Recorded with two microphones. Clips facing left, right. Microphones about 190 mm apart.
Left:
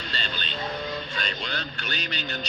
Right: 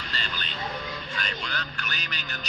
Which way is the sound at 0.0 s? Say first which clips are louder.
Left 2 dB; 30° left (ahead or behind).